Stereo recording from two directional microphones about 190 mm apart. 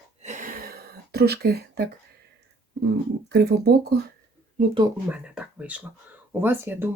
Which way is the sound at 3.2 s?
60° right (ahead or behind).